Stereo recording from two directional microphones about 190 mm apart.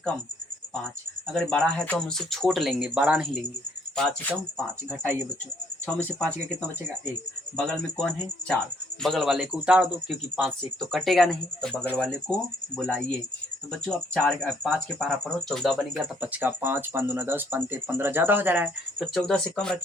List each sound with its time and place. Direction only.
1.3 s speech: 5° left (ahead or behind)
3.9 s speech: 5° left (ahead or behind)
5.8 s speech: 5° left (ahead or behind)
7.5 s speech: 5° left (ahead or behind)